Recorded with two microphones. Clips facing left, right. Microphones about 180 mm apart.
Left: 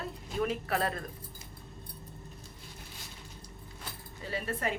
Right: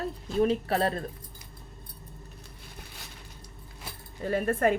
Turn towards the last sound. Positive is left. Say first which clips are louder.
# right 9 dB
turn(degrees=-50)  # may be behind; listen again after turning